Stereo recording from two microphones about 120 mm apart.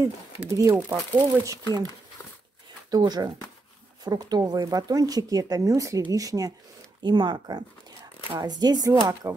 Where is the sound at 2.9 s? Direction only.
35° right (ahead or behind).